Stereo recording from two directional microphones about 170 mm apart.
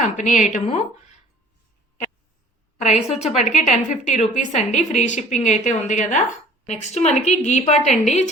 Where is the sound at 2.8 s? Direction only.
40° left (ahead or behind).